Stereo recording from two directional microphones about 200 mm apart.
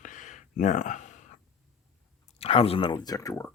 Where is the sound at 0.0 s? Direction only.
40° left (ahead or behind).